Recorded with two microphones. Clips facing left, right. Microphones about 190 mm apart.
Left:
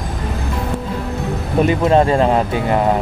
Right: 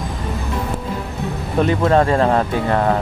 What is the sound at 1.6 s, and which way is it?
Speech, 20° left (ahead or behind).